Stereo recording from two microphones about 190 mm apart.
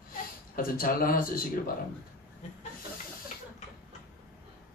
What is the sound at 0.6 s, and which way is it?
Speech, 50° left (ahead or behind).